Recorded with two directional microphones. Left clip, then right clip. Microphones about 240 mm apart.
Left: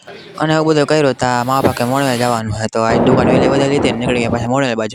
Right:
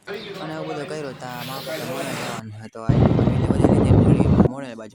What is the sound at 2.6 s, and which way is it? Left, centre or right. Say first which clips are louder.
Speech: left 9 dB; left.